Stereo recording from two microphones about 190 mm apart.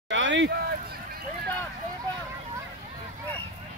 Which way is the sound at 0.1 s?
75° right (ahead or behind).